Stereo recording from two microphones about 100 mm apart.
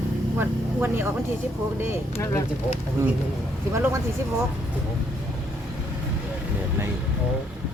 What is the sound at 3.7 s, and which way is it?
Speech, 30° right (ahead or behind).